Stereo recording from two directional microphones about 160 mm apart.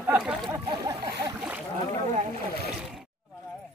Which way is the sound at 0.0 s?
10° right (ahead or behind).